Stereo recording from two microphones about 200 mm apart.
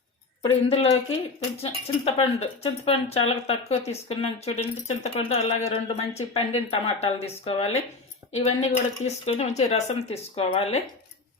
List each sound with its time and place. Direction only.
0.4 s speech: 25° left (ahead or behind)